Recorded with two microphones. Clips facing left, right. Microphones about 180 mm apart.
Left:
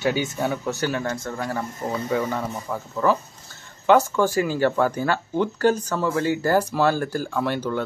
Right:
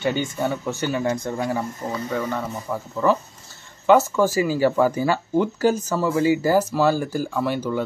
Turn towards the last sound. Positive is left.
turn(degrees=-5)  # may be behind; listen again after turning